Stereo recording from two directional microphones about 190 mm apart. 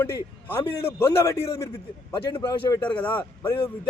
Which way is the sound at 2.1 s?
25° left (ahead or behind).